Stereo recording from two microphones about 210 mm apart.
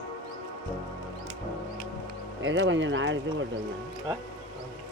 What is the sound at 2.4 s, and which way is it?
Speech, 60° right (ahead or behind).